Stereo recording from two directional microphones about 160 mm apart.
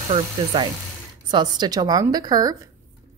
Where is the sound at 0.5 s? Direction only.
30° right (ahead or behind).